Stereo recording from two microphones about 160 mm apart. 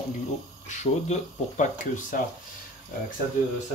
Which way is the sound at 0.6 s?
50° left (ahead or behind).